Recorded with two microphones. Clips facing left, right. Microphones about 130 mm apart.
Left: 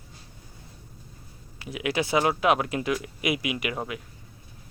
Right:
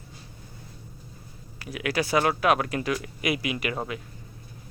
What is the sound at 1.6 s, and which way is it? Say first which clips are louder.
Speech: even; 20° left (ahead or behind).